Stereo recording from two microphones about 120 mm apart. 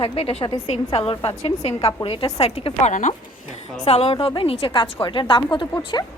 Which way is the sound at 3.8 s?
55° left (ahead or behind).